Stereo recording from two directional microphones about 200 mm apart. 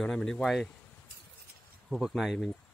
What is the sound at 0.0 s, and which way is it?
Speech, 5° left (ahead or behind).